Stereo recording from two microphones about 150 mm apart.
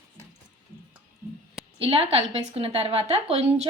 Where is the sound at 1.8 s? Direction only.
40° right (ahead or behind).